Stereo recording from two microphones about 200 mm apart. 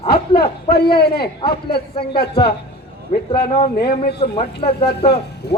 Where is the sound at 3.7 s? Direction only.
55° left (ahead or behind).